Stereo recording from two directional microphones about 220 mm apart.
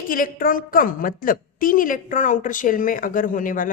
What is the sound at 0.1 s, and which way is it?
A woman's voice, 40° left (ahead or behind).